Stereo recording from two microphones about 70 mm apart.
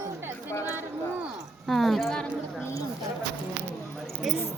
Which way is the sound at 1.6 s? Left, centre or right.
Centre.